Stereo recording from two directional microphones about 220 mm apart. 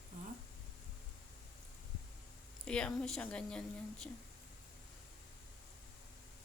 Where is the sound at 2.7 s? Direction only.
5° left (ahead or behind).